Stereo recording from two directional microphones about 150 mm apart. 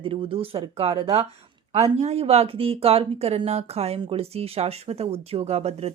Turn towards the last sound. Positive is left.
turn(degrees=-45)  # may be behind; listen again after turning